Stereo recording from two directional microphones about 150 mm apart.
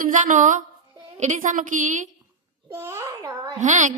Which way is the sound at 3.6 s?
55° right (ahead or behind).